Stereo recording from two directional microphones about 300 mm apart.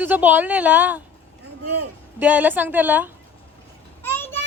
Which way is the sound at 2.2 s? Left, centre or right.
Centre.